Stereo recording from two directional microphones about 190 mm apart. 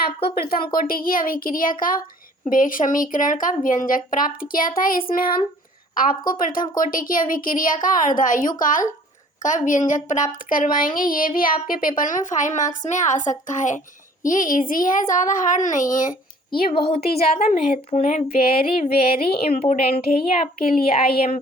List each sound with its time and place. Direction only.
0.3 s speech: 55° left (ahead or behind)
16.9 s speech: 30° left (ahead or behind)